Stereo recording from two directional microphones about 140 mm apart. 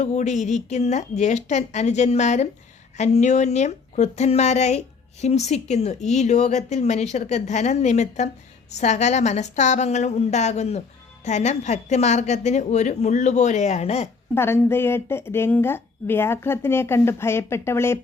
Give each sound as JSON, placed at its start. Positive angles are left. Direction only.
{"t": 0.0, "sound": "a woman's voice", "side_deg": 55}
{"t": 14.3, "sound": "a woman's voice", "side_deg": 15}